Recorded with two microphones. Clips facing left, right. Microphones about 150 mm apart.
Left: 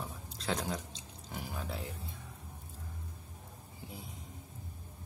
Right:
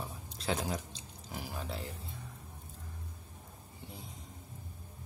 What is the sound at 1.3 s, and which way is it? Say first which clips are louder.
Speech: even; centre (ahead or behind).